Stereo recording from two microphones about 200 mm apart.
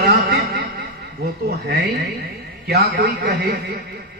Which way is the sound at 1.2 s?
50° right (ahead or behind).